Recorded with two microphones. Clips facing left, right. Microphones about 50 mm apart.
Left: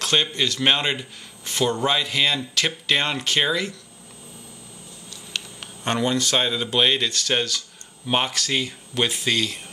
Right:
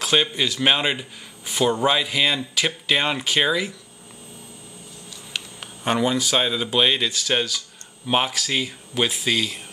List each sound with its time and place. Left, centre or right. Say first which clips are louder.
0.0 s a man's voice: right 1 dB; centre
5.3 s speech: even; centre